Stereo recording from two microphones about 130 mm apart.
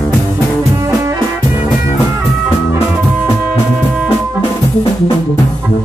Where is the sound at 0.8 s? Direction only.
25° right (ahead or behind).